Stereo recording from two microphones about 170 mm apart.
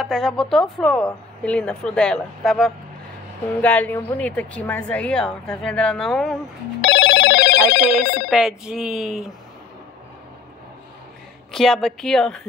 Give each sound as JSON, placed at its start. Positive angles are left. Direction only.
{"t": 0.0, "sound": "speech", "side_deg": 0}
{"t": 6.8, "sound": "telephone bell ringing", "side_deg": 90}
{"t": 7.8, "sound": "speech", "side_deg": -5}
{"t": 11.5, "sound": "speech", "side_deg": 0}